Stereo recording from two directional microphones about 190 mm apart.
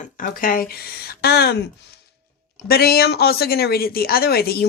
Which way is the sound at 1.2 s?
60° left (ahead or behind).